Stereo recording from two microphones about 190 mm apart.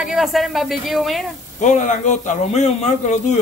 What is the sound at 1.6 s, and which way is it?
A man's voice, 40° left (ahead or behind).